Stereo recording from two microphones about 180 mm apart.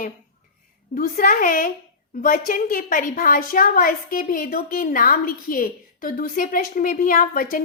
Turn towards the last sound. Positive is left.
turn(degrees=50)  # may be behind; listen again after turning